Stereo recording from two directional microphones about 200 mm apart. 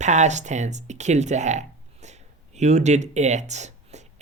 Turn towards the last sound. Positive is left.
turn(degrees=-35)  # may be behind; listen again after turning